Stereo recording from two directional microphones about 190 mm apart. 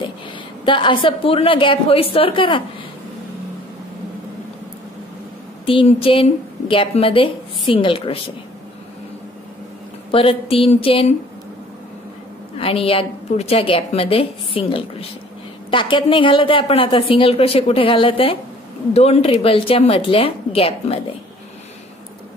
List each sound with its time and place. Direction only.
0.7 s a woman's voice: 25° left (ahead or behind)
5.7 s a woman's voice: 30° left (ahead or behind)
10.1 s a woman's voice: 30° left (ahead or behind)
12.5 s a woman's voice: 30° left (ahead or behind)